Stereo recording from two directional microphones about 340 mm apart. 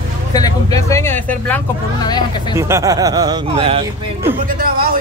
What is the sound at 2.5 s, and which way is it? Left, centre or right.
A man's voice, centre.